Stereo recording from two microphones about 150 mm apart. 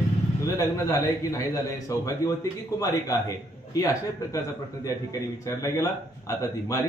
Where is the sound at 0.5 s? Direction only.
20° left (ahead or behind).